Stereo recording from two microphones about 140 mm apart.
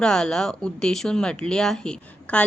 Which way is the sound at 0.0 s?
5° left (ahead or behind).